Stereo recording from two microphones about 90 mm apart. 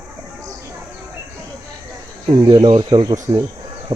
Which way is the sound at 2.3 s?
45° right (ahead or behind).